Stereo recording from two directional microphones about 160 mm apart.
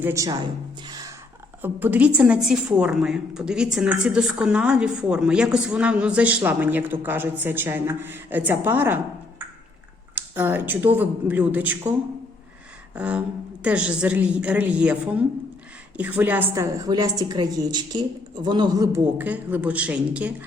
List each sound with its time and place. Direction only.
0.0 s a woman's voice: 20° right (ahead or behind)
0.9 s a sound: 25° right (ahead or behind)
1.6 s a woman's voice: 10° right (ahead or behind)
10.2 s a woman's voice: 10° right (ahead or behind)
12.9 s a woman's voice: 10° right (ahead or behind); by 18.9 s 30° right (ahead or behind)
18.9 s a woman's voice: 10° right (ahead or behind)